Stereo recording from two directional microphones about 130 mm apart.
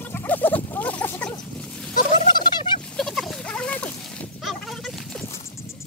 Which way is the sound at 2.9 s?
Centre (ahead or behind).